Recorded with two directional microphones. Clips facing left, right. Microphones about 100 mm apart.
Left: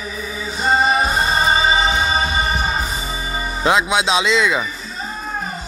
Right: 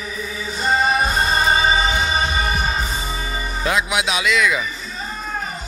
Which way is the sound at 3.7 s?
25° left (ahead or behind).